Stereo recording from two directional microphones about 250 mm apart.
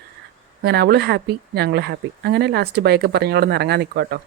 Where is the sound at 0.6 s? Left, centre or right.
Right.